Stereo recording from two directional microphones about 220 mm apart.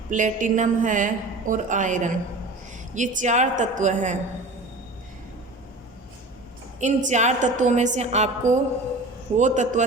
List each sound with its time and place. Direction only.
0.1 s a woman's voice: 35° right (ahead or behind)
6.7 s a woman's voice: 30° right (ahead or behind)